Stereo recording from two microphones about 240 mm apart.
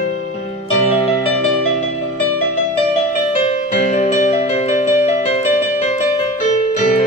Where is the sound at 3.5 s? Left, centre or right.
Left.